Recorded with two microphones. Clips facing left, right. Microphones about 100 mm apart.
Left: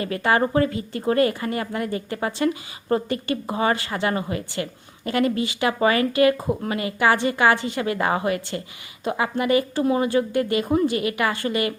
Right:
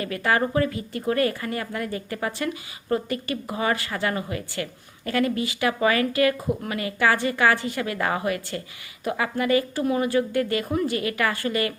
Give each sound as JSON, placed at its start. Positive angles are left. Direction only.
{"t": 0.0, "sound": "speech", "side_deg": 25}